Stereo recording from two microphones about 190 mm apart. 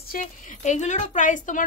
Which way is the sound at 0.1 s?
40° left (ahead or behind).